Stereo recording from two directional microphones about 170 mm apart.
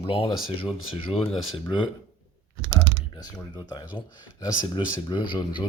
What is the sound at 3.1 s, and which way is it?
Speech, 25° left (ahead or behind).